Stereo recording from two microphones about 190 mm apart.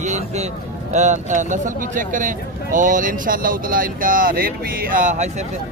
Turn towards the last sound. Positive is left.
turn(degrees=-40)  # may be behind; listen again after turning